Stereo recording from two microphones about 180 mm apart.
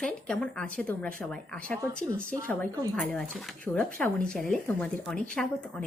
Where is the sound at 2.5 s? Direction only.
5° left (ahead or behind).